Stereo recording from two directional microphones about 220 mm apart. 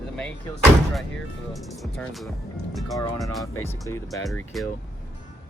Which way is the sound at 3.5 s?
10° left (ahead or behind).